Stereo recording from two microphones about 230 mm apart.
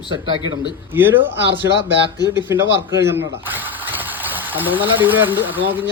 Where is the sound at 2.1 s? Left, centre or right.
Centre.